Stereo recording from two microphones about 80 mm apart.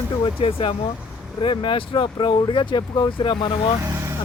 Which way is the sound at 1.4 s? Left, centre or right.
Left.